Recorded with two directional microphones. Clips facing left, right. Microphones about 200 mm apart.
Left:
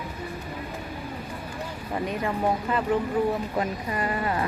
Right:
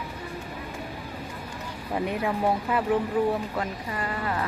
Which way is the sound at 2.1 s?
5° right (ahead or behind).